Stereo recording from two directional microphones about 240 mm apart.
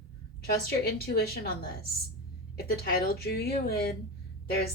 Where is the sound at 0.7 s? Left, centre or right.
Left.